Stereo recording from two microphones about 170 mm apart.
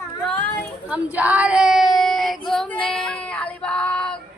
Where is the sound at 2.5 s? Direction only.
5° left (ahead or behind).